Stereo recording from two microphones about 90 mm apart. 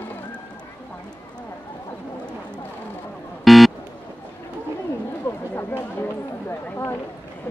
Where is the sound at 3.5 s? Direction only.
Centre (ahead or behind).